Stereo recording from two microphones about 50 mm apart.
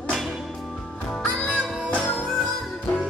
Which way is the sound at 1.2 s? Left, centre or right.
Left.